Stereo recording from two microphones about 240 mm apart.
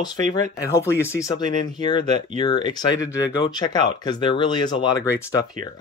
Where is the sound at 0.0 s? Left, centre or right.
Centre.